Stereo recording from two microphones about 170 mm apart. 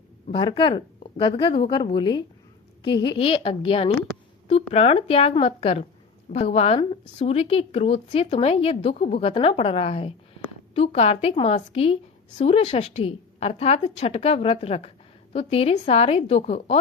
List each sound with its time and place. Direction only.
0.3 s a woman's voice: 30° left (ahead or behind)